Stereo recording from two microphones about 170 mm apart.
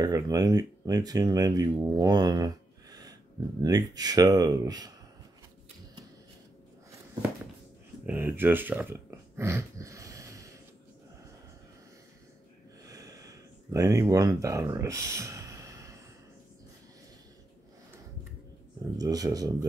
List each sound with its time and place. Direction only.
0.0 s speech: 20° right (ahead or behind)
8.0 s speech: 10° right (ahead or behind)
12.8 s a sound: 20° right (ahead or behind)
18.9 s speech: 20° right (ahead or behind)